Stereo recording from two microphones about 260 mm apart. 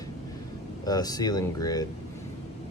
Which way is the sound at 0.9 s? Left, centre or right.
Centre.